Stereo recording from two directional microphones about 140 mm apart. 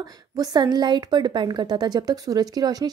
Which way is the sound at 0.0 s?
25° right (ahead or behind).